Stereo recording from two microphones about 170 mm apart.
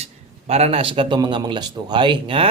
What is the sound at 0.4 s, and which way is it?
A man's voice, 40° right (ahead or behind).